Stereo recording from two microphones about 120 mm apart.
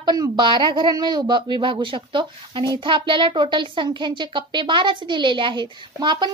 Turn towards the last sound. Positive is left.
turn(degrees=-40)  # may be behind; listen again after turning